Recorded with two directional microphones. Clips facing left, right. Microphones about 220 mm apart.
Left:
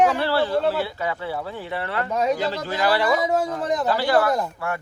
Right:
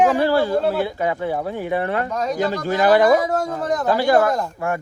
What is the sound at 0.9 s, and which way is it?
Speech, 45° right (ahead or behind).